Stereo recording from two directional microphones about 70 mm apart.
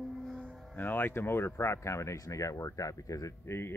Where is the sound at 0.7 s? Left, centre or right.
Left.